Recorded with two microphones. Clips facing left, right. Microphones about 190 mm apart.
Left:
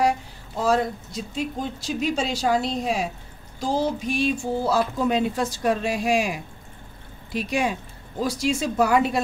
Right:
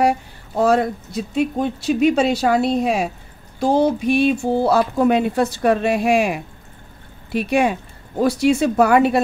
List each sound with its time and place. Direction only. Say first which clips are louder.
0.6 s speech: right 5 dB; 60° right (ahead or behind)